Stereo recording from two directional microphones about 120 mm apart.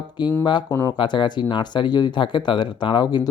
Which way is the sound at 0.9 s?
40° left (ahead or behind).